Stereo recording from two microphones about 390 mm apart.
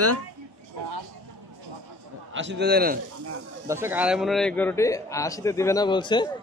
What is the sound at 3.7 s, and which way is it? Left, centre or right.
A man's voice, centre.